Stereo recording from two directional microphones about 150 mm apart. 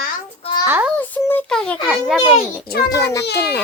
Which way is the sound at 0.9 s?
10° left (ahead or behind).